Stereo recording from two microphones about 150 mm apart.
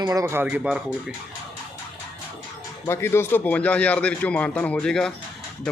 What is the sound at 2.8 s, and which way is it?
Speech, 15° left (ahead or behind).